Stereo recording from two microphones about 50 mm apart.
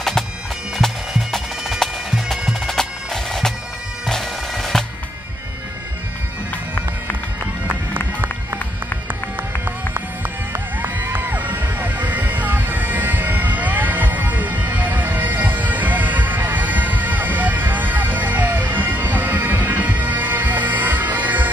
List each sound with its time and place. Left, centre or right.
0.7 s bagpipes: centre
10.5 s music: right